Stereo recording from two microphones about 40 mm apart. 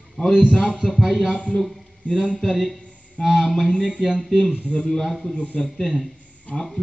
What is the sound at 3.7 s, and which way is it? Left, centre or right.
Speech, left.